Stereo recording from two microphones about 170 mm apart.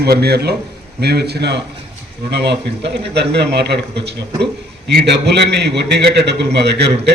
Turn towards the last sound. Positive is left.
turn(degrees=-80)